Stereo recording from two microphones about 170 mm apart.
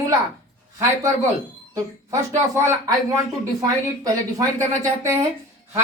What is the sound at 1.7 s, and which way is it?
A woman's voice, 15° right (ahead or behind).